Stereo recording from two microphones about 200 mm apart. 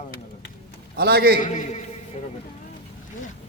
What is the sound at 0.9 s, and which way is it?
Speech, 50° right (ahead or behind).